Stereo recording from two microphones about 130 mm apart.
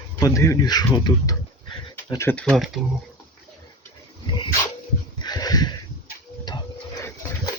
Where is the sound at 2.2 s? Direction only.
15° left (ahead or behind).